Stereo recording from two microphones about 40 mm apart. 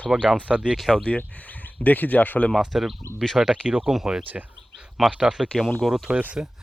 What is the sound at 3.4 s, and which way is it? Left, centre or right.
Speech, right.